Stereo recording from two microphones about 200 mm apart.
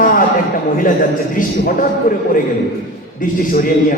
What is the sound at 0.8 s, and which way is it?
A man's voice, 45° left (ahead or behind).